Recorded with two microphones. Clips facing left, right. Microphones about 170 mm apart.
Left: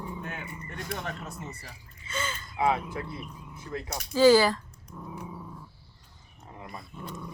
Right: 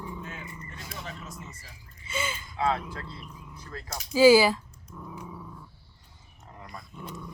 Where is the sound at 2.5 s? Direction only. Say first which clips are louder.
Left 2 dB; 15° left (ahead or behind).